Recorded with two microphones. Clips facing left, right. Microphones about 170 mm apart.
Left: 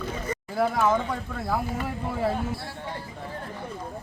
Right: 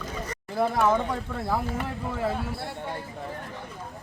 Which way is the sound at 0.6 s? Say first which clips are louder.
Even; centre (ahead or behind).